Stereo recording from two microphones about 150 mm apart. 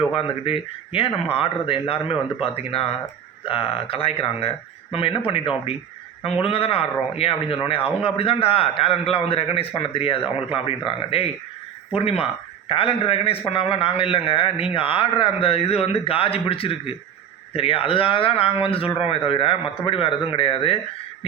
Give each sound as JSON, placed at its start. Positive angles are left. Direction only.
{"t": 0.1, "sound": "a man's voice", "side_deg": 40}
{"t": 6.4, "sound": "a man's voice", "side_deg": 40}